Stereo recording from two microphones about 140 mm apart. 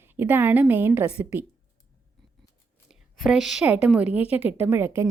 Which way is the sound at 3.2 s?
Centre (ahead or behind).